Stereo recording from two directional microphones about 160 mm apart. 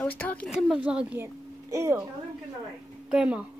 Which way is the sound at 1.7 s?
20° right (ahead or behind).